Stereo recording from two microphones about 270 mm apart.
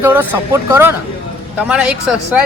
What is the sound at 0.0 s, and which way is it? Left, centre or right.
A man's voice, centre.